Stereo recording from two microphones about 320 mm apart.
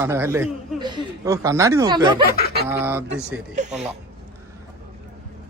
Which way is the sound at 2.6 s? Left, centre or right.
Centre.